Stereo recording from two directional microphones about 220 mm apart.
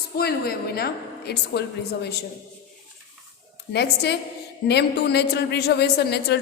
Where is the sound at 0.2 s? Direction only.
45° left (ahead or behind).